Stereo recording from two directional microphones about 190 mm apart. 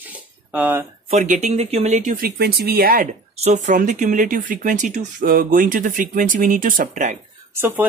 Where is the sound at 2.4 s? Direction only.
55° right (ahead or behind).